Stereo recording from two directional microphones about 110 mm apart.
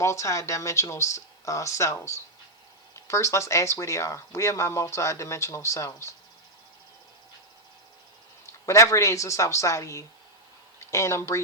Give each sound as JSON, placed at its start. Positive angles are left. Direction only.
{"t": 0.0, "sound": "speech", "side_deg": 25}
{"t": 8.6, "sound": "speech", "side_deg": 25}